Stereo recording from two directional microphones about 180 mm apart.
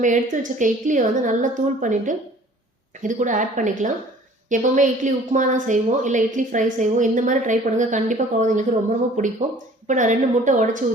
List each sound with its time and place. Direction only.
0.0 s speech: 45° right (ahead or behind)